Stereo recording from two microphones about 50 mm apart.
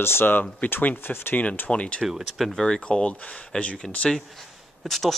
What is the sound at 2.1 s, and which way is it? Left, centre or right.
Speech, centre.